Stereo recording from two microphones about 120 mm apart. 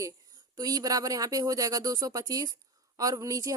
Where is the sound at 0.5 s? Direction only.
35° right (ahead or behind).